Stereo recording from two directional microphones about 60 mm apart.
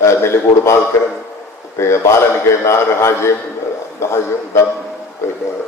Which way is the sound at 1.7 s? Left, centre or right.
Left.